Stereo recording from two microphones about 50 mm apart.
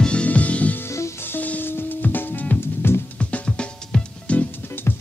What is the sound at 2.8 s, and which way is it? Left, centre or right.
Music, left.